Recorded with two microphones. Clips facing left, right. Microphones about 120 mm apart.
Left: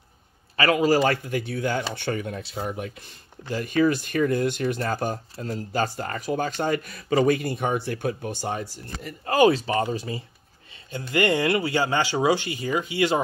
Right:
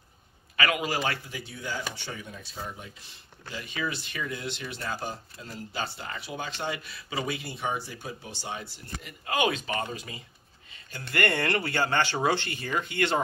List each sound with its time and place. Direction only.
0.6 s speech: 35° left (ahead or behind); by 2.9 s 70° left (ahead or behind)
3.4 s speech: 45° left (ahead or behind); by 10.2 s 30° left (ahead or behind)
10.9 s speech: 15° left (ahead or behind)